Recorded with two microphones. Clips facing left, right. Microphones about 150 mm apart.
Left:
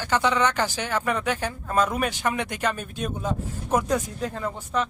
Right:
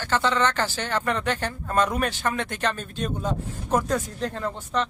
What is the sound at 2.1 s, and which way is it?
Speech, 15° left (ahead or behind).